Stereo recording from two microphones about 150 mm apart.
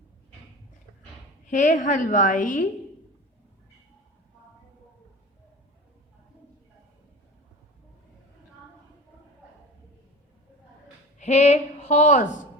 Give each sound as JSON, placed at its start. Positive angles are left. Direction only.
{"t": 1.5, "sound": "a woman's voice", "side_deg": 55}
{"t": 11.2, "sound": "a woman's voice", "side_deg": 50}